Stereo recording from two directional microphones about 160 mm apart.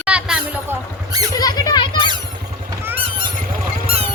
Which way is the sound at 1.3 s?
25° left (ahead or behind).